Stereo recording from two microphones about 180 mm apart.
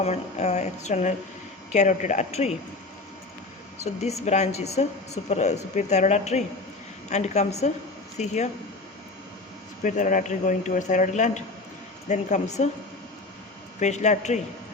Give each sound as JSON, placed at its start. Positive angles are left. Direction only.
{"t": 0.0, "sound": "a woman's voice", "side_deg": 35}
{"t": 4.0, "sound": "a woman's voice", "side_deg": 40}
{"t": 9.8, "sound": "a woman's voice", "side_deg": 45}
{"t": 13.7, "sound": "a woman's voice", "side_deg": 40}